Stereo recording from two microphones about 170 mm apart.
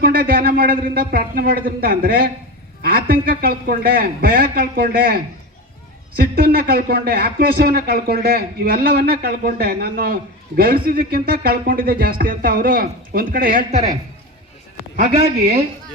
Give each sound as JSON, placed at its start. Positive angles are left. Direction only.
{"t": 0.0, "sound": "speech", "side_deg": -60}
{"t": 14.9, "sound": "a man's voice", "side_deg": -55}